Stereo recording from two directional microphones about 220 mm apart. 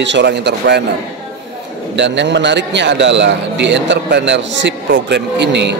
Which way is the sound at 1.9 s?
55° right (ahead or behind).